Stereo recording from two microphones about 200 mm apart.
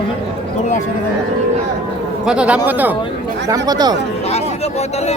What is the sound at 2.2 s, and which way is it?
Speech, 5° right (ahead or behind).